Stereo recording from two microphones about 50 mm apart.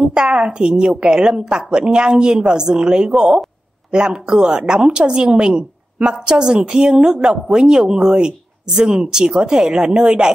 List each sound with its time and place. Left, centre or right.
0.1 s a woman's voice: centre